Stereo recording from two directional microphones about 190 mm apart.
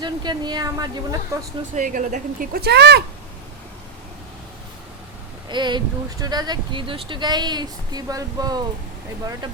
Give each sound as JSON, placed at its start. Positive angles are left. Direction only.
{"t": 0.0, "sound": "speech", "side_deg": -25}
{"t": 1.7, "sound": "speech", "side_deg": -45}
{"t": 5.5, "sound": "speech", "side_deg": -25}